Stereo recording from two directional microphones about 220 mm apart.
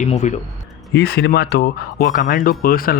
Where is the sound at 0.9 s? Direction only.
45° left (ahead or behind).